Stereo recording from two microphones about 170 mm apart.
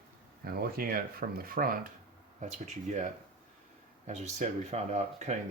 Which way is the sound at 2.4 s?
45° right (ahead or behind).